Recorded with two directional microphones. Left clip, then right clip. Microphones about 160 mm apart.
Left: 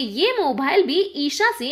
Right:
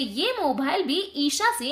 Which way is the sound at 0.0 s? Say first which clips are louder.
Left 5 dB; 15° left (ahead or behind).